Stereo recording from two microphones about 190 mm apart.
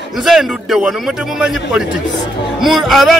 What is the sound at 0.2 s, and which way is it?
A man's voice, centre (ahead or behind).